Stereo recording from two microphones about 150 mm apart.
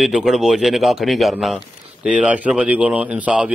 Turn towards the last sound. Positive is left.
turn(degrees=-10)  # may be behind; listen again after turning